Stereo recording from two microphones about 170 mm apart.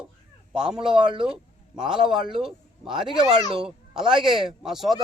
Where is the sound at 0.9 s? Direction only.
30° right (ahead or behind).